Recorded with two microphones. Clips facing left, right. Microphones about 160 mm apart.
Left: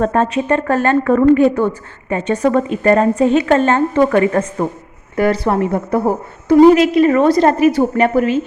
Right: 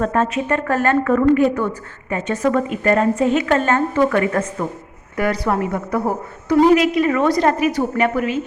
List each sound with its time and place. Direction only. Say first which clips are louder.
0.0 s a woman's voice: left 3 dB; 35° left (ahead or behind)